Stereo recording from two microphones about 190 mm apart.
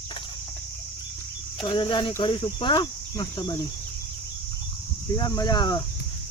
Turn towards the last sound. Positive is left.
turn(degrees=20)  # may be behind; listen again after turning